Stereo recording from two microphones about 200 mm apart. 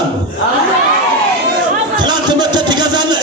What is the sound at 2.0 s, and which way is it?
Speech, 20° right (ahead or behind).